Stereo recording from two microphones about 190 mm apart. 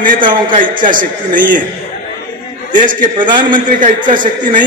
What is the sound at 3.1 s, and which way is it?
Speech, 25° right (ahead or behind).